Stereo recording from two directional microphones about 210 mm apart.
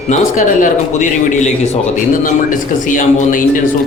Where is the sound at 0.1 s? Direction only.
35° left (ahead or behind).